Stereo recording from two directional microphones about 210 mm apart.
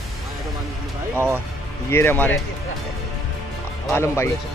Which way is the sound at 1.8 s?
10° left (ahead or behind).